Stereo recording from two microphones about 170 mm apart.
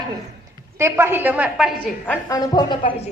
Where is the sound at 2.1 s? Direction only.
20° left (ahead or behind).